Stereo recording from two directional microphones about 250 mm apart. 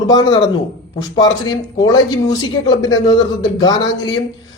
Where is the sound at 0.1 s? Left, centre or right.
Centre.